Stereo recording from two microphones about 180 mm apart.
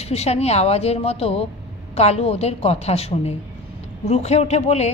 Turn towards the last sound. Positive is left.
turn(degrees=40)  # may be behind; listen again after turning